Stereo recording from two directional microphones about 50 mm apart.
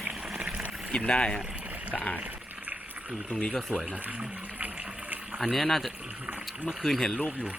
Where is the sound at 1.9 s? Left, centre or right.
Left.